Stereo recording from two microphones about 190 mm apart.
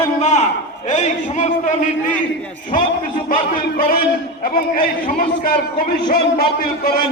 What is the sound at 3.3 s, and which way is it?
A man's voice, 50° left (ahead or behind).